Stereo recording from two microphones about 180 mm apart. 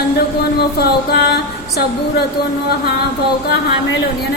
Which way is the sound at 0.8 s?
65° left (ahead or behind).